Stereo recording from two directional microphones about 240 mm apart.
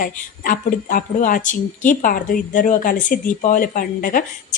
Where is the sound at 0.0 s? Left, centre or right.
Left.